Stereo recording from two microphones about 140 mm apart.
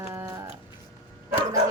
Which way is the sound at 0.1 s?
20° right (ahead or behind).